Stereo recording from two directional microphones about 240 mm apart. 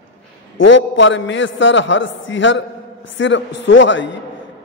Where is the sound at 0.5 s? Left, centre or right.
Left.